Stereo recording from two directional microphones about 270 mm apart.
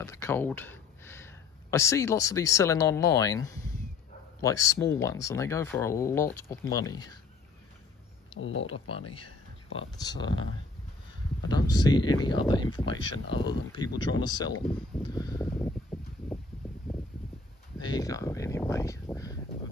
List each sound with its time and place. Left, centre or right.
0.0 s speech: centre
8.4 s speech: left
9.8 s speech: centre
11.4 s speech: centre
15.0 s a sound: centre
17.7 s speech: centre